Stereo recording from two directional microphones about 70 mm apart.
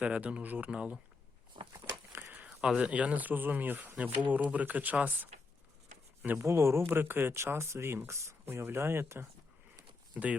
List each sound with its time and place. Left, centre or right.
0.0 s speech: centre
2.1 s a sound: right
2.5 s speech: centre
6.4 s speech: right
10.2 s speech: right